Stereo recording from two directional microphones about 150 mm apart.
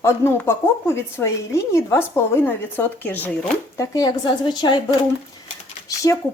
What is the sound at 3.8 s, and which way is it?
Speech, 25° left (ahead or behind).